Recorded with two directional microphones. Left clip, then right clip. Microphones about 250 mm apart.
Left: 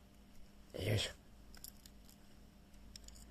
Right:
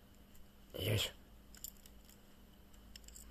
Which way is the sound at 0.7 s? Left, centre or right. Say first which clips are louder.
Right 1 dB; centre.